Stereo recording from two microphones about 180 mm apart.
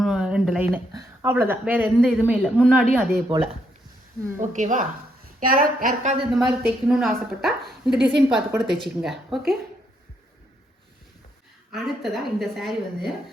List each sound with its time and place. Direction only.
0.0 s a sound: 5° right (ahead or behind)
1.2 s a woman's voice: 10° right (ahead or behind)
2.7 s speech: 10° right (ahead or behind)
3.2 s speech: 30° right (ahead or behind)
4.4 s a woman's voice: 45° right (ahead or behind)
6.7 s a woman's voice: 5° right (ahead or behind)
7.6 s speech: 70° right (ahead or behind)
8.5 s a woman's voice: centre (ahead or behind)
11.7 s a woman's voice: centre (ahead or behind)